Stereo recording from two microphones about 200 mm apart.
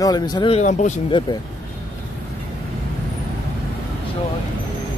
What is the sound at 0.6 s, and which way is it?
Speech, 35° left (ahead or behind).